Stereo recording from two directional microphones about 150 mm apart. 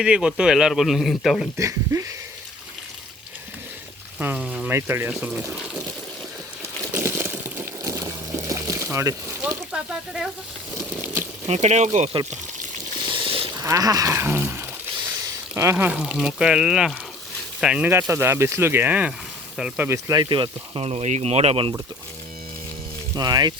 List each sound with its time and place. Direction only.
0.0 s a man's voice: 5° right (ahead or behind)
1.5 s speech: 20° right (ahead or behind)
4.2 s speech: 10° right (ahead or behind)
6.6 s a sound: 15° right (ahead or behind)
9.4 s speech: 5° right (ahead or behind)
11.4 s speech: 50° right (ahead or behind)
13.0 s a sound: 35° right (ahead or behind)
13.6 s a man's voice: 25° right (ahead or behind)
20.1 s speech: 30° right (ahead or behind)
23.1 s speech: 25° right (ahead or behind)